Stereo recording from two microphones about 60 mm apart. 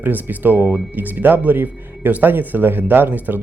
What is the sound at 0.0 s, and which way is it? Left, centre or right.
Speech, right.